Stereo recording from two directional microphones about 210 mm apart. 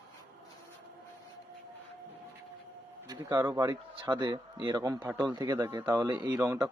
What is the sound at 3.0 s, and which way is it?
Speech, 20° right (ahead or behind).